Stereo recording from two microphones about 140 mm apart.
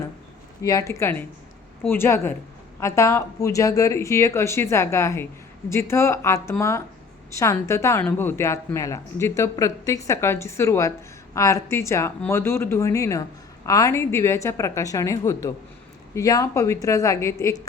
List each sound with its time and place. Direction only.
0.6 s a woman's voice: 25° left (ahead or behind)